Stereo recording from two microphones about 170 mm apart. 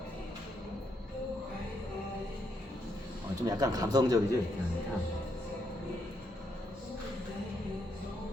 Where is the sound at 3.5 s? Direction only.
20° right (ahead or behind).